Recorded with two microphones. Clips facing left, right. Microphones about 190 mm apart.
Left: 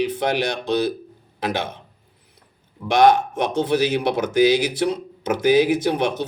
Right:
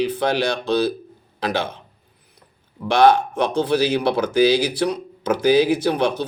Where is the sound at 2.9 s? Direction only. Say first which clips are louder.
Even; 20° left (ahead or behind).